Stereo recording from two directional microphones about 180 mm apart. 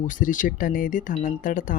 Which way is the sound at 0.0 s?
45° left (ahead or behind).